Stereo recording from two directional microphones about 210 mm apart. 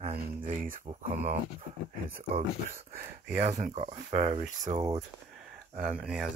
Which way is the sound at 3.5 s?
30° right (ahead or behind).